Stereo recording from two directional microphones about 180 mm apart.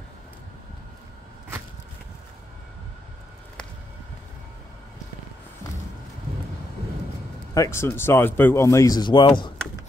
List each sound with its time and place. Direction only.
7.5 s speech: 15° left (ahead or behind)